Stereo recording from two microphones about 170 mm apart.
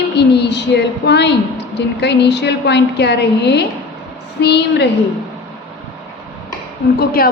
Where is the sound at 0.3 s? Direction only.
80° left.